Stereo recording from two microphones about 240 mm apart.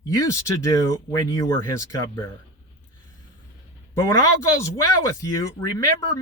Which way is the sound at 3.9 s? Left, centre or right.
Centre.